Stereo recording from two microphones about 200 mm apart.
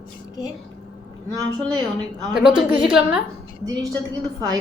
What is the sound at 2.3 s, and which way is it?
Speech, 5° right (ahead or behind).